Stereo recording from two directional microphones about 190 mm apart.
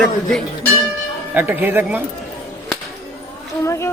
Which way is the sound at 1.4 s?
10° right (ahead or behind).